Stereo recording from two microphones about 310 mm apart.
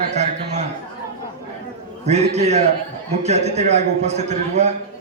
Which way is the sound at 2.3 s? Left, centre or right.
Right.